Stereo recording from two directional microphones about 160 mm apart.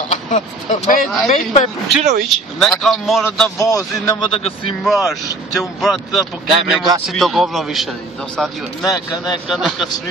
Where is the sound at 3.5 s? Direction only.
20° left (ahead or behind).